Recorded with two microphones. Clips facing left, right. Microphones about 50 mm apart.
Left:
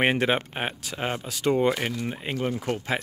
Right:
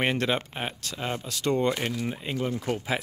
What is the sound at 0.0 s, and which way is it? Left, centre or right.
Speech, left.